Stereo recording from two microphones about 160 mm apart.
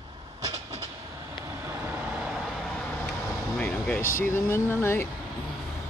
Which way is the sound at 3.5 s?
10° left (ahead or behind).